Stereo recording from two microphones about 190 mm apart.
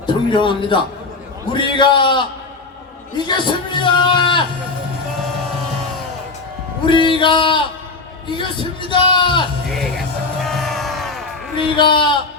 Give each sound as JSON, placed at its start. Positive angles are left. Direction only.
{"t": 0.0, "sound": "a man's voice", "side_deg": 25}
{"t": 3.2, "sound": "speech", "side_deg": 25}
{"t": 6.8, "sound": "speech", "side_deg": 25}
{"t": 8.3, "sound": "music", "side_deg": 25}
{"t": 9.6, "sound": "music", "side_deg": 0}
{"t": 11.5, "sound": "speech", "side_deg": 25}